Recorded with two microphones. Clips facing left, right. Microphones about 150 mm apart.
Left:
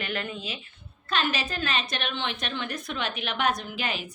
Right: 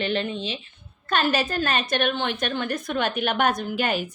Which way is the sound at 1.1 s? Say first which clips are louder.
Right 6 dB; 45° right (ahead or behind).